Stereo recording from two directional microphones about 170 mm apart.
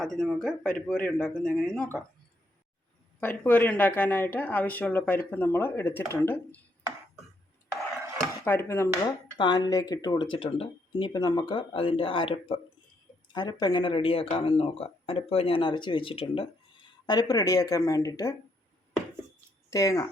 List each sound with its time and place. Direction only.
0.0 s speech: centre (ahead or behind)
3.2 s speech: 10° left (ahead or behind)
8.4 s speech: 15° left (ahead or behind)
19.7 s speech: 20° left (ahead or behind)